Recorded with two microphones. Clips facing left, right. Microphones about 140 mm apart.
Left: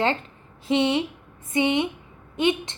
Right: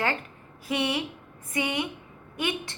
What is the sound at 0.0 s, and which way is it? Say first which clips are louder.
A woman's voice: left 5 dB; 25° left (ahead or behind).